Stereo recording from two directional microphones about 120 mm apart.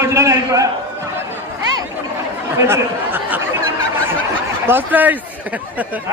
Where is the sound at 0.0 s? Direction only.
25° right (ahead or behind).